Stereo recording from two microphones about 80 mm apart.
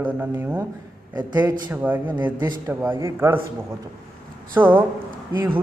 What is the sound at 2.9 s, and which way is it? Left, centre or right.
Speech, right.